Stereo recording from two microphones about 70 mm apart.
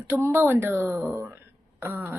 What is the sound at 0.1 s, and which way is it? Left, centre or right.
A woman's voice, right.